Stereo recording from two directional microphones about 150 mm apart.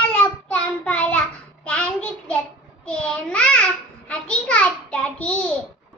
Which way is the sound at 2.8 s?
5° left (ahead or behind).